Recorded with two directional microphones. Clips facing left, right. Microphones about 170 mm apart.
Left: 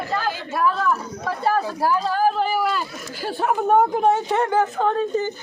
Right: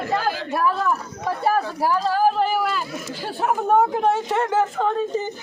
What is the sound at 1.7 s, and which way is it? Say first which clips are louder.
Speech: even; centre (ahead or behind).